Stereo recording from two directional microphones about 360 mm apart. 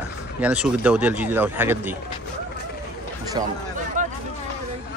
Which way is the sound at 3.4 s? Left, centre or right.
Centre.